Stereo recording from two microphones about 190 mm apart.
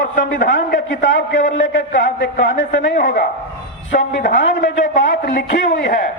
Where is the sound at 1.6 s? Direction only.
75° left (ahead or behind).